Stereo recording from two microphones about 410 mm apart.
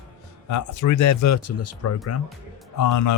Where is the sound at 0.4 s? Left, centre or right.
Left.